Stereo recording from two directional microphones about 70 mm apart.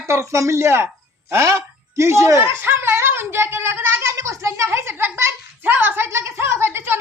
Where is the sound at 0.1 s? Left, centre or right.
Right.